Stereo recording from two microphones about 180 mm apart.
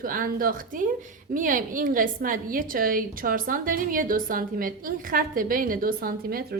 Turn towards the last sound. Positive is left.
turn(degrees=-55)  # may be behind; listen again after turning